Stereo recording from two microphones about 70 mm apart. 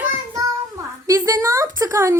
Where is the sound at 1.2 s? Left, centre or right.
Right.